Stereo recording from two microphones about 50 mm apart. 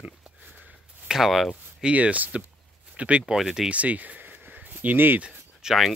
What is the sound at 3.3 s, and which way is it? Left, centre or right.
Speech, centre.